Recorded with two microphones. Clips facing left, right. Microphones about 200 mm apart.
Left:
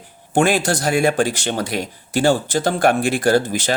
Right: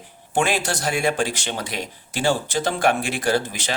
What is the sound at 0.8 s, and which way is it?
Speech, 55° left (ahead or behind).